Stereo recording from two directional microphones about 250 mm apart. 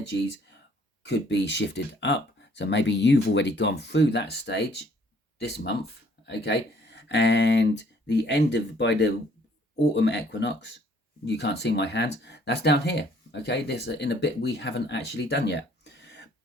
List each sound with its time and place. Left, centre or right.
1.0 s speech: left